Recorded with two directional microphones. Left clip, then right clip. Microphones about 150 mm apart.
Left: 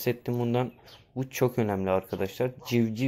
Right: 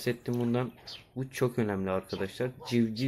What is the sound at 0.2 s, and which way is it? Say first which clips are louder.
Speech: left 3 dB; 25° left (ahead or behind).